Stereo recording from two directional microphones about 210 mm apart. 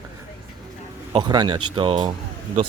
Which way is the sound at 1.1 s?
20° right (ahead or behind).